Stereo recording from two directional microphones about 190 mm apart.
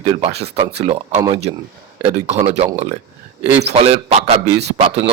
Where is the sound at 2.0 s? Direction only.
35° right (ahead or behind).